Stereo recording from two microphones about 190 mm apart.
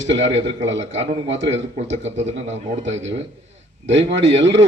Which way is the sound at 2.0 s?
35° right (ahead or behind).